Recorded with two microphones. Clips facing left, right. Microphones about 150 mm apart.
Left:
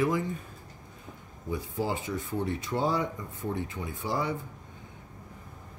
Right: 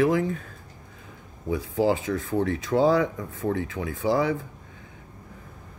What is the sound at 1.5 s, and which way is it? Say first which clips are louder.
Speech: right 8 dB; 90° right.